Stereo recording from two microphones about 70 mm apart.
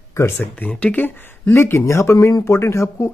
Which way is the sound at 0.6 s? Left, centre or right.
Centre.